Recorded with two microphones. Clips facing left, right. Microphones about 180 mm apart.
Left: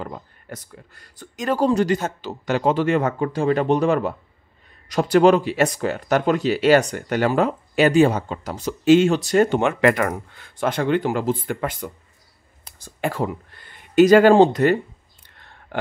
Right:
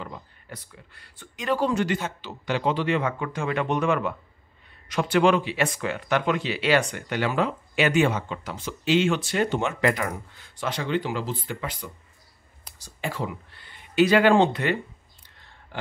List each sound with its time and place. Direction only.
0.0 s speech: 45° left (ahead or behind)
15.2 s clicking: 55° left (ahead or behind)